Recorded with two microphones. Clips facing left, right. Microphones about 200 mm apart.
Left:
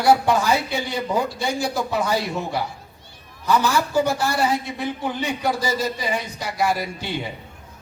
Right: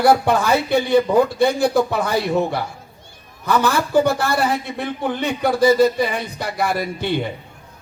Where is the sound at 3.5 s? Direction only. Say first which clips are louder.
Right 2 dB; 60° right (ahead or behind).